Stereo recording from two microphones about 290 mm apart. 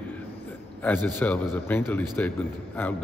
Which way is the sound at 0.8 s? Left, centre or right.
Centre.